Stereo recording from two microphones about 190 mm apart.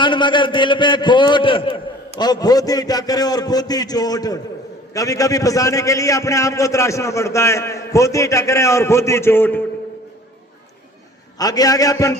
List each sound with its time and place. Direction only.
0.0 s a man's voice: 25° left (ahead or behind)
11.3 s a man's voice: 20° left (ahead or behind)